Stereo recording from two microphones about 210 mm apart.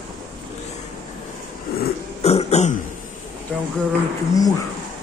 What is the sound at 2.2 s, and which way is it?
Throat clearing, 30° left (ahead or behind).